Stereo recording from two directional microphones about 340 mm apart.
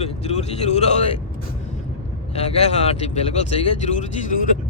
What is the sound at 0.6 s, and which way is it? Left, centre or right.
Speech, centre.